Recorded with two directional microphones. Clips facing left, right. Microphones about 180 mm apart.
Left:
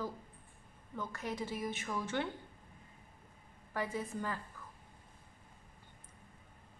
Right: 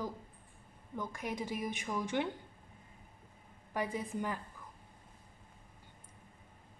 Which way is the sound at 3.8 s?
15° right (ahead or behind).